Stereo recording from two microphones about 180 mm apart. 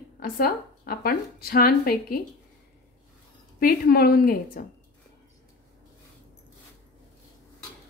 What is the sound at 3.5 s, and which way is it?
Speech, 55° left (ahead or behind).